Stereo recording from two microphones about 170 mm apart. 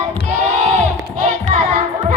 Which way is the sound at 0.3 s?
45° right (ahead or behind).